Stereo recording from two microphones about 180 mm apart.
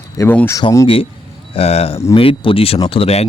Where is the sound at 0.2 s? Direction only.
10° left (ahead or behind).